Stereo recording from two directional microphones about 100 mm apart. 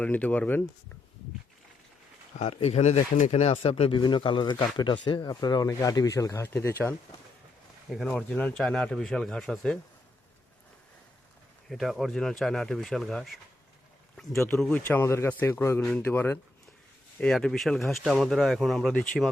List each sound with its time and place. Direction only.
0.0 s speech: 15° left (ahead or behind)
2.5 s speech: 90° left
3.9 s speech: 50° left (ahead or behind); by 6.7 s 25° left (ahead or behind)
7.9 s speech: 5° right (ahead or behind)
8.1 s speech: 15° left (ahead or behind)
11.7 s speech: centre (ahead or behind)
14.7 s speech: 20° left (ahead or behind)
17.2 s speech: 5° left (ahead or behind)